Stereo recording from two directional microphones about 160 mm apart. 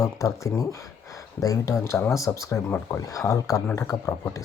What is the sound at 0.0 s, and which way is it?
Speech, 20° left (ahead or behind).